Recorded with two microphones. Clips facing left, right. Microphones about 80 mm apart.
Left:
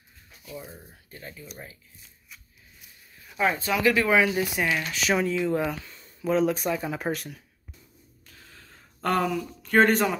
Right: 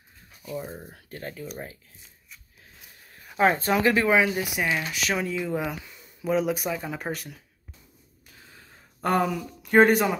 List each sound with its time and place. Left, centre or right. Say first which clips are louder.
0.4 s speech: right 6 dB; right
0.8 s speech: right 6 dB; right
3.3 s speech: right 4 dB; right
4.1 s speech: even; centre
8.3 s a sound: even; centre